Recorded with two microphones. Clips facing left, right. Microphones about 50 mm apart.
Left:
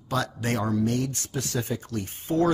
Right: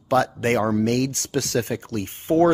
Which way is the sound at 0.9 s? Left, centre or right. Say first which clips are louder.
Right 5 dB; right.